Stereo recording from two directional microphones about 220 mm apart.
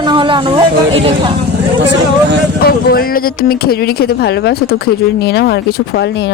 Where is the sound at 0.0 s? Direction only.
20° right (ahead or behind).